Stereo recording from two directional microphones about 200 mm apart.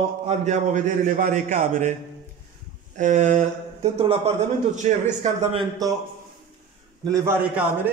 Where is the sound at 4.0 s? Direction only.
30° right (ahead or behind).